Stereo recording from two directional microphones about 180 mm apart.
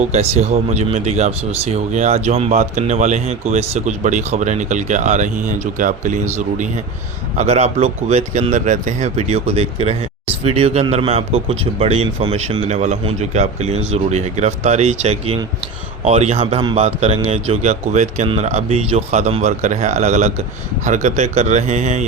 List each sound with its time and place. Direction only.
0.0 s speech: 35° right (ahead or behind)